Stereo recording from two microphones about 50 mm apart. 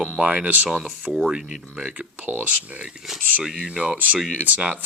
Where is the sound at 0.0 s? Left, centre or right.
Centre.